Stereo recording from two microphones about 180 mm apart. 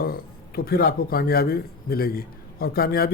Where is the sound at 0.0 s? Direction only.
55° left (ahead or behind).